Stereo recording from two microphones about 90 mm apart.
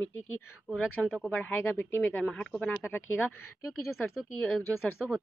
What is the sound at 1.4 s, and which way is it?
Speech, 20° left (ahead or behind).